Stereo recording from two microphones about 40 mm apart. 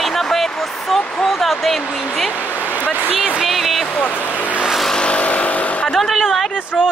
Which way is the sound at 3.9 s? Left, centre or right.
Left.